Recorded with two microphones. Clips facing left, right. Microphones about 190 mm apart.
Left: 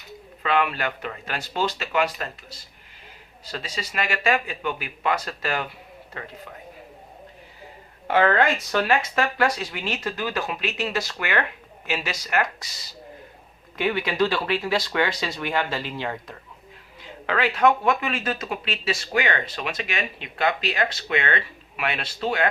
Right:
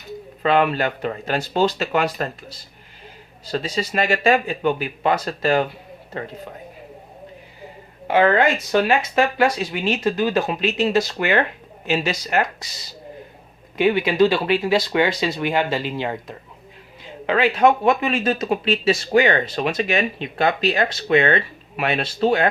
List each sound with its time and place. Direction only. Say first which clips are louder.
0.4 s speech: right 6 dB; 35° right (ahead or behind)
3.5 s speech: right 9 dB; 30° right (ahead or behind)
8.0 s speech: right 3 dB; 10° right (ahead or behind)
13.7 s speech: right 6 dB; 20° right (ahead or behind)